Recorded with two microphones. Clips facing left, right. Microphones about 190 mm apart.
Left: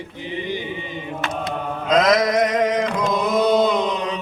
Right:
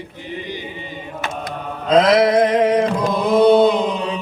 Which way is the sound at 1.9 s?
30° right (ahead or behind).